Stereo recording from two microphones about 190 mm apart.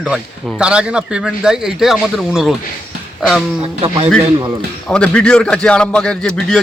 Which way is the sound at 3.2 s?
Centre (ahead or behind).